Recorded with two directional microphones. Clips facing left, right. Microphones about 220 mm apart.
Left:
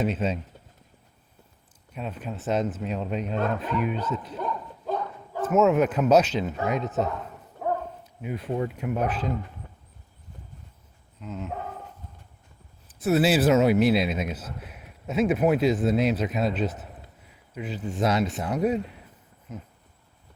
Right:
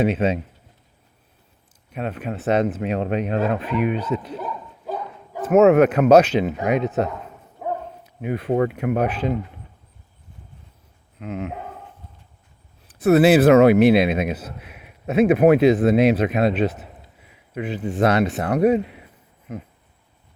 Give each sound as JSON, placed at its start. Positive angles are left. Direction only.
{"t": 0.0, "sound": "speech", "side_deg": -70}
{"t": 1.9, "sound": "speech", "side_deg": -70}
{"t": 4.4, "sound": "bow-wow", "side_deg": -5}
{"t": 5.5, "sound": "speech", "side_deg": -65}
{"t": 7.6, "sound": "bow-wow", "side_deg": -5}
{"t": 8.0, "sound": "speech", "side_deg": -65}
{"t": 11.2, "sound": "speech", "side_deg": -70}
{"t": 12.9, "sound": "speech", "side_deg": -60}